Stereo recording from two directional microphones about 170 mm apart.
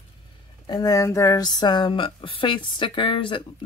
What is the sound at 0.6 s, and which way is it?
Speech, 25° left (ahead or behind).